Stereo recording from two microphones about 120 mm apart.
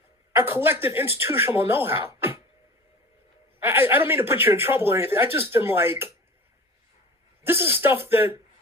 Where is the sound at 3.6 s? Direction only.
20° right (ahead or behind).